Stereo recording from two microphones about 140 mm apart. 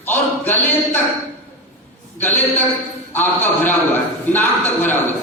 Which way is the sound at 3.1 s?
15° left (ahead or behind).